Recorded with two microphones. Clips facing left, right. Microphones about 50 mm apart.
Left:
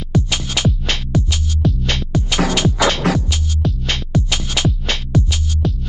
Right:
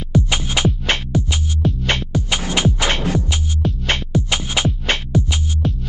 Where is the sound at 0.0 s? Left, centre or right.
Right.